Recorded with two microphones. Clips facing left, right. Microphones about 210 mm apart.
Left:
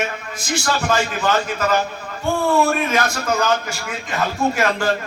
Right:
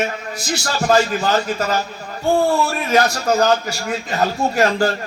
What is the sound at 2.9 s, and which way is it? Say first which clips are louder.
A man's voice: right 4 dB; 35° right (ahead or behind).